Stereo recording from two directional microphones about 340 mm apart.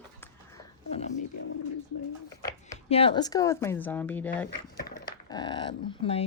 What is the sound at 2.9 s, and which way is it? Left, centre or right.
Speech, centre.